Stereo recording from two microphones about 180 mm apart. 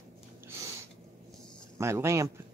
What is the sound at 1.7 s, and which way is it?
Speech, 15° right (ahead or behind).